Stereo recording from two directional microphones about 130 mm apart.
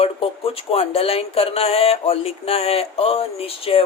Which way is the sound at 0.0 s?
45° left (ahead or behind).